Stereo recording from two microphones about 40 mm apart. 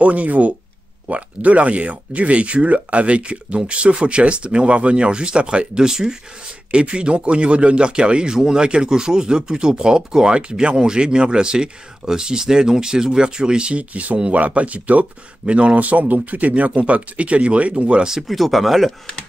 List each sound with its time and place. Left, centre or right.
0.0 s speech: right
5.9 s speech: centre
6.7 s speech: right
18.2 s speech: centre